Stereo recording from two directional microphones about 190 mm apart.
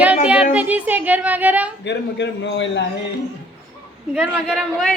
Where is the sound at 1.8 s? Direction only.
65° left (ahead or behind).